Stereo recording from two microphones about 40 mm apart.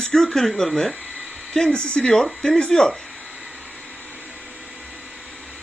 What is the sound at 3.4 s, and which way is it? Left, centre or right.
Vehicle, right.